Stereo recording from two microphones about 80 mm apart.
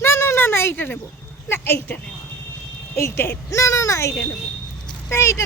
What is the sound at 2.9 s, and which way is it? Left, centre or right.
Speech, left.